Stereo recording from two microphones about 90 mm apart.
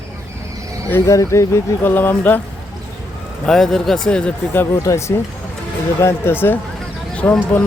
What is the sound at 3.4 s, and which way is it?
Speech, 5° left (ahead or behind).